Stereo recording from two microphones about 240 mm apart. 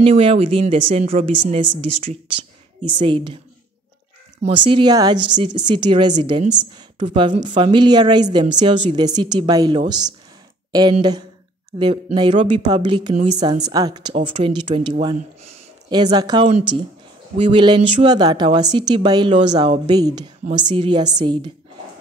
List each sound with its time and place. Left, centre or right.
0.0 s a woman's voice: right
4.4 s a woman's voice: right